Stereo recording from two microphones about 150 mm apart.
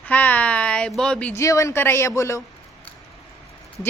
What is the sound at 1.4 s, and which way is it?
Speech, 20° left (ahead or behind).